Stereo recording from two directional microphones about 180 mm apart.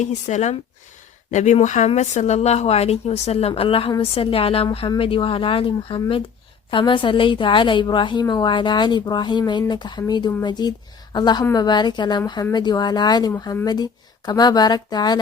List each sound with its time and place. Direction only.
0.0 s a woman's voice: 40° left (ahead or behind); by 15.2 s 25° left (ahead or behind)